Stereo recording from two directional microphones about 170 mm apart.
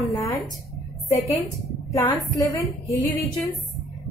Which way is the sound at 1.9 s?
20° left (ahead or behind).